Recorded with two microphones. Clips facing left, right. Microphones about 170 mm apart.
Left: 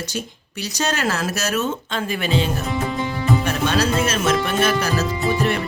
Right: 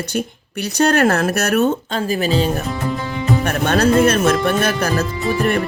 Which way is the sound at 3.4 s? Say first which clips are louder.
Right 4 dB; 55° right (ahead or behind).